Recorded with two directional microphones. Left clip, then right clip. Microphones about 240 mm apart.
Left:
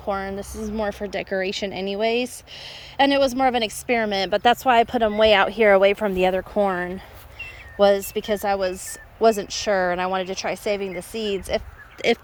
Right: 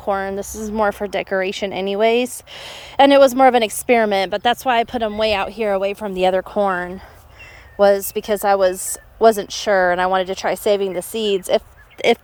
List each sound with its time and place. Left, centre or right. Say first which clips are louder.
0.0 s speech: right 6 dB; centre
10.7 s a woman's voice: right 9 dB; right
10.9 s a woman's voice: right 7 dB; centre